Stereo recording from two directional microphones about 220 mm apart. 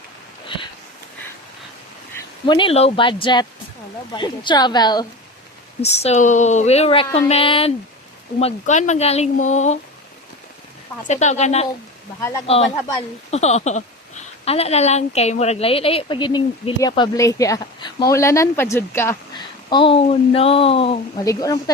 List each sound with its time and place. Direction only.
0.4 s sniff: 20° left (ahead or behind)
2.1 s speech: 20° left (ahead or behind)
5.8 s speech: 30° left (ahead or behind)
11.1 s speech: 30° left (ahead or behind)
21.2 s speech: 15° left (ahead or behind)